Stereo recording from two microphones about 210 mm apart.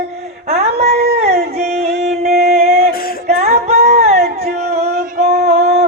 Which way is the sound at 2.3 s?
45° right (ahead or behind).